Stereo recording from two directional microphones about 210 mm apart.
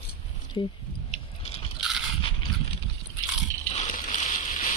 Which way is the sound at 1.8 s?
Centre (ahead or behind).